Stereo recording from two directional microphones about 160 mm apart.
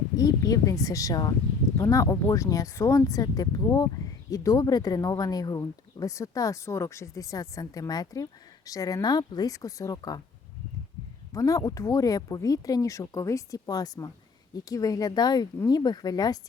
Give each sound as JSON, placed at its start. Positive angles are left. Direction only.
{"t": 0.2, "sound": "speech", "side_deg": 20}
{"t": 11.3, "sound": "speech", "side_deg": 20}